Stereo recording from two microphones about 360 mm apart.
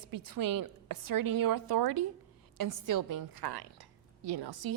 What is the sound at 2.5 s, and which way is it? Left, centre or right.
A woman's voice, right.